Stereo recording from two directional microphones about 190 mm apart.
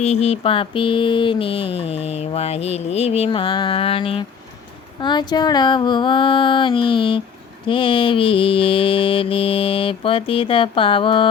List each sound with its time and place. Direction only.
0.0 s mantra: 30° left (ahead or behind)